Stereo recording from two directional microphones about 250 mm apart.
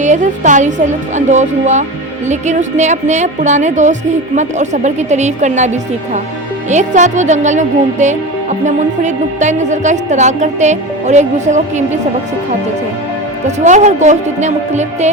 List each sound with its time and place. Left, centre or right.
0.0 s a woman's voice: right
13.7 s speech: right